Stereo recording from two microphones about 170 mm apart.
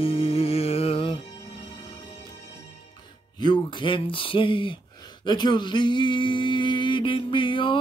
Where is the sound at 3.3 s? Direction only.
25° left (ahead or behind).